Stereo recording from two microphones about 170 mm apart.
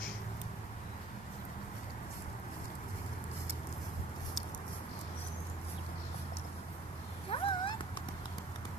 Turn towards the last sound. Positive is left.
turn(degrees=30)  # may be behind; listen again after turning